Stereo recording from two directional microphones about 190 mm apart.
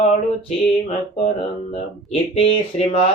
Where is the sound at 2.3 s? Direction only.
30° left (ahead or behind).